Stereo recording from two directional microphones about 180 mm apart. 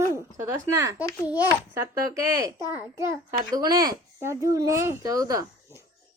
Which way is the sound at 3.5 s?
20° right (ahead or behind).